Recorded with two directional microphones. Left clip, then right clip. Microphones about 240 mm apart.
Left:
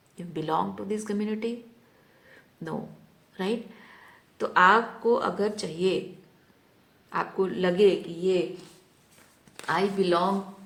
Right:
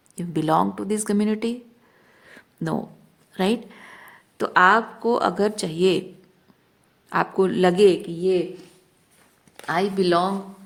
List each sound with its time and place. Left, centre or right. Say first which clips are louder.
0.2 s speech: right 7 dB; right
3.3 s speech: right 7 dB; right
7.1 s speech: right 7 dB; right
9.6 s speech: right 3 dB; right